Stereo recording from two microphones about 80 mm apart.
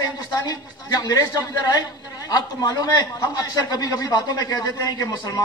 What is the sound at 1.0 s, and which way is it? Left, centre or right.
Speech, left.